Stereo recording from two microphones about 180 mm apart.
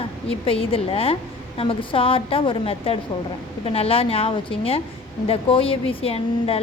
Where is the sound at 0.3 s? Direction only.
30° left (ahead or behind).